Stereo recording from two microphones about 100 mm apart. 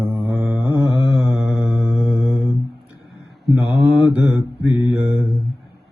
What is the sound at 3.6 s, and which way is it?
Mantra, 15° right (ahead or behind).